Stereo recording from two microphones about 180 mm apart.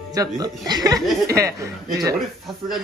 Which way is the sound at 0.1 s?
20° right (ahead or behind).